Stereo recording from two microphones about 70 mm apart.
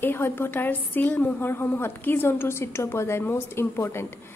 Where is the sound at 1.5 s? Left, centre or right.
Left.